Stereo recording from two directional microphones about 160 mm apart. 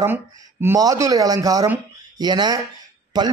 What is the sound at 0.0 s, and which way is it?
A man's voice, 15° right (ahead or behind).